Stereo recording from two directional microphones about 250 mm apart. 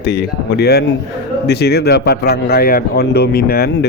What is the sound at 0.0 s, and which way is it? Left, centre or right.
Speech, left.